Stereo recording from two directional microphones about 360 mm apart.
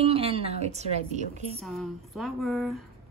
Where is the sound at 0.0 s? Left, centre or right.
Centre.